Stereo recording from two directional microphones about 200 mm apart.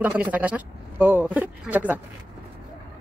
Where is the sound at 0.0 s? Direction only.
5° right (ahead or behind).